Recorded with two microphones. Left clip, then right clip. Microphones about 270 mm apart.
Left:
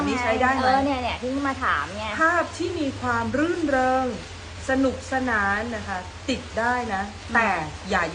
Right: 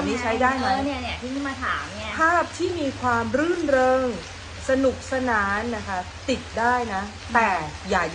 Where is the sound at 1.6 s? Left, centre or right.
Left.